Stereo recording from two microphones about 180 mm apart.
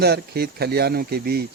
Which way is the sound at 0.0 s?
60° right (ahead or behind).